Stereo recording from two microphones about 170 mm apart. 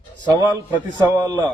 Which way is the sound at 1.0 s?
25° right (ahead or behind).